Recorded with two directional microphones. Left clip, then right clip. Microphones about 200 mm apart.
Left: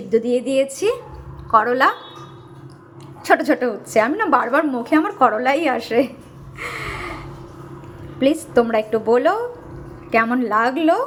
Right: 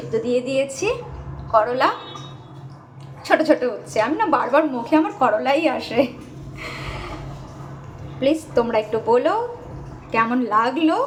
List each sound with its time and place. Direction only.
0.1 s a woman's voice: 35° left (ahead or behind)
3.2 s a woman's voice: 30° left (ahead or behind)
6.6 s gasp: 35° left (ahead or behind)
8.2 s a woman's voice: 30° left (ahead or behind)